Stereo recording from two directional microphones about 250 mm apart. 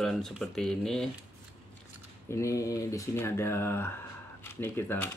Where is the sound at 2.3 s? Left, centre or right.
Centre.